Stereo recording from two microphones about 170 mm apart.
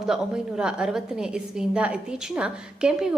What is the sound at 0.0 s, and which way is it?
A woman's voice, 5° right (ahead or behind).